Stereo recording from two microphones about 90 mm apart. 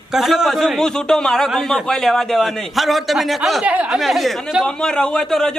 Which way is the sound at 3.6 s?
15° right (ahead or behind).